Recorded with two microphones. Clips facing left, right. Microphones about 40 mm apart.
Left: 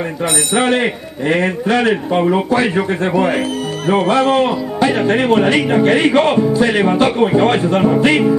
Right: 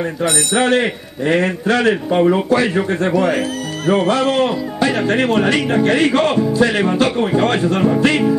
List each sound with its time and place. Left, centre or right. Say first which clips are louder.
0.2 s speech: left 1 dB; left
2.0 s speech: right 1 dB; centre
2.3 s speech: left 1 dB; centre